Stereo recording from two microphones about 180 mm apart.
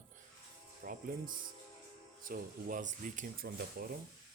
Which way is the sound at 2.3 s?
45° right (ahead or behind).